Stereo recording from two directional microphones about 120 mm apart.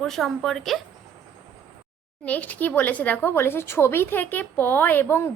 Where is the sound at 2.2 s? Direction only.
10° left (ahead or behind).